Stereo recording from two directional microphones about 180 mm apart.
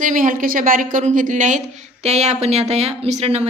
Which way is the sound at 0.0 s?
45° right (ahead or behind).